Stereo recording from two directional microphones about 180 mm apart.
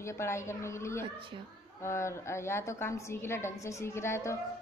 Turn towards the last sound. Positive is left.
turn(degrees=15)  # may be behind; listen again after turning